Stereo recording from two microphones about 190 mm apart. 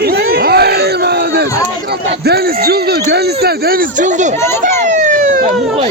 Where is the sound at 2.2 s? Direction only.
55° right (ahead or behind); by 4.3 s 40° right (ahead or behind).